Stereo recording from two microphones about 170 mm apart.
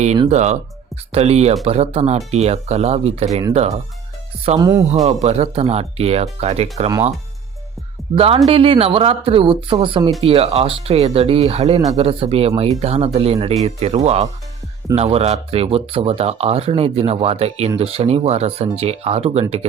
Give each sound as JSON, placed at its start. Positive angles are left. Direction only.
{"t": 0.3, "sound": "speech", "side_deg": -40}
{"t": 4.5, "sound": "speech", "side_deg": -15}
{"t": 4.9, "sound": "speech", "side_deg": -40}
{"t": 8.1, "sound": "speech", "side_deg": -35}